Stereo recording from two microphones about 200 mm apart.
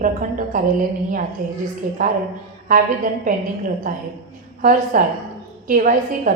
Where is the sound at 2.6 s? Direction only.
40° right (ahead or behind).